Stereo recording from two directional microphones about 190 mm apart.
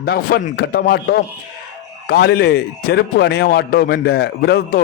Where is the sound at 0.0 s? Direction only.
55° left (ahead or behind).